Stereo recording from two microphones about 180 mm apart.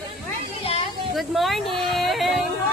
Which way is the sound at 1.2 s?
Centre (ahead or behind).